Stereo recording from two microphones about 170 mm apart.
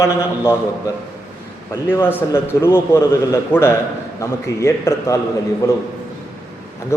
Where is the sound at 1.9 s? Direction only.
15° left (ahead or behind).